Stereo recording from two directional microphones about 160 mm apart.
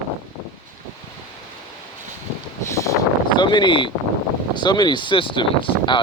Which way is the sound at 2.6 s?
20° left (ahead or behind).